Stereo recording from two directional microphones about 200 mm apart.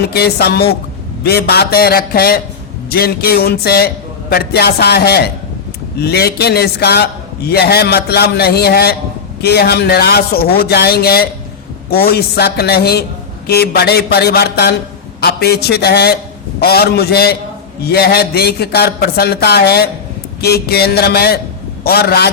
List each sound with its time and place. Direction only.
0.1 s a man's voice: 55° left (ahead or behind)